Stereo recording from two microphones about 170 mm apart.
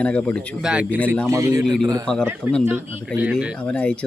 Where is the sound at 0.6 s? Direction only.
5° right (ahead or behind); by 1.8 s 20° right (ahead or behind).